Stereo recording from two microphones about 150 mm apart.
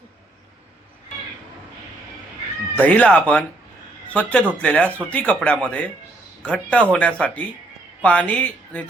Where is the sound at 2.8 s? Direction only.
10° left (ahead or behind).